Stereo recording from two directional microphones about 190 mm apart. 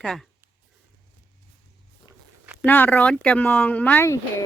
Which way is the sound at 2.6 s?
10° left (ahead or behind).